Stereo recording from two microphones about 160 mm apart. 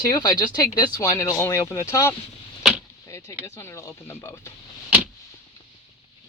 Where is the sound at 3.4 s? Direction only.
15° left (ahead or behind).